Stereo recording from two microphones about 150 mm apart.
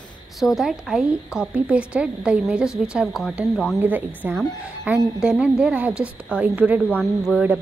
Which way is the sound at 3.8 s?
10° right (ahead or behind).